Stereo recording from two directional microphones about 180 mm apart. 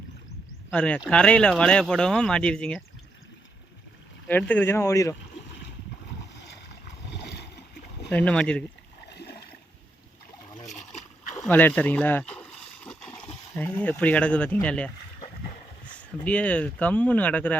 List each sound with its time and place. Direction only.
0.7 s speech: 5° left (ahead or behind)
4.3 s speech: 10° left (ahead or behind)
7.1 s a sound: 70° left (ahead or behind)
8.1 s speech: 5° left (ahead or behind)
11.3 s a sound: 10° left (ahead or behind)
13.7 s speech: 10° left (ahead or behind)
16.0 s speech: 5° left (ahead or behind)